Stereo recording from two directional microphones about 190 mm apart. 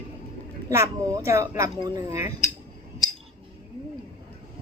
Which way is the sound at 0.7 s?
15° right (ahead or behind).